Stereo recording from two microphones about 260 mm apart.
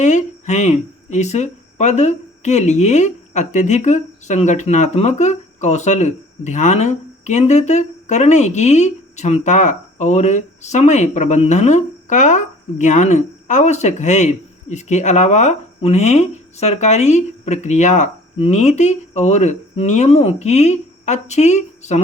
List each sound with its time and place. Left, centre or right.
0.0 s speech: left